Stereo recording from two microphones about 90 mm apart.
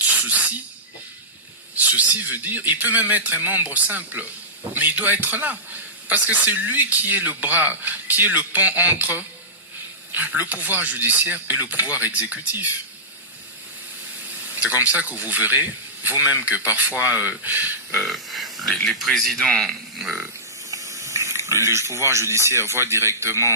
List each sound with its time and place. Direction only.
0.0 s snake: 15° right (ahead or behind)
1.7 s speech: 20° right (ahead or behind)
14.4 s speech: 20° right (ahead or behind)
17.9 s speech: centre (ahead or behind)
20.7 s speech: 40° right (ahead or behind)